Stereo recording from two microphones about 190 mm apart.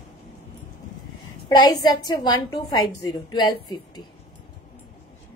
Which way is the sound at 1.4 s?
20° left (ahead or behind).